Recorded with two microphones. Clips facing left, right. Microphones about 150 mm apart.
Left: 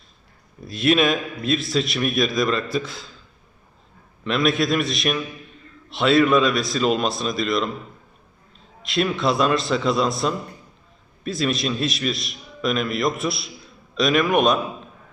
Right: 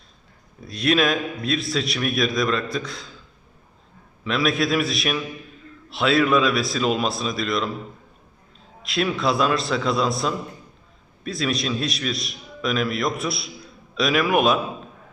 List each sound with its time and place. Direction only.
0.6 s a man's voice: centre (ahead or behind)
4.2 s a man's voice: centre (ahead or behind)
8.8 s a man's voice: centre (ahead or behind)